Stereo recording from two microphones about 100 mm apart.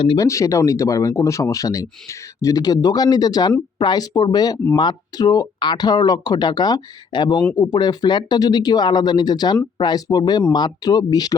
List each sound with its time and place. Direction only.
0.2 s speech: 30° left (ahead or behind)